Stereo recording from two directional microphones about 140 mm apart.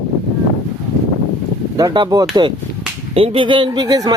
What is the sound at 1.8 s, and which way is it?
Speech, 25° right (ahead or behind).